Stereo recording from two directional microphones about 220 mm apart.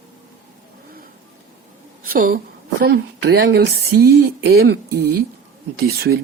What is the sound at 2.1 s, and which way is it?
Speech, 40° right (ahead or behind).